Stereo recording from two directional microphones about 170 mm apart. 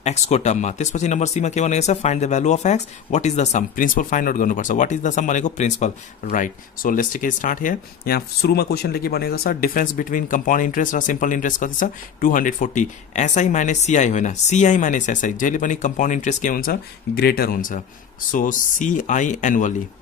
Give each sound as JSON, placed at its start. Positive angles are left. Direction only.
{"t": 0.0, "sound": "speech", "side_deg": 40}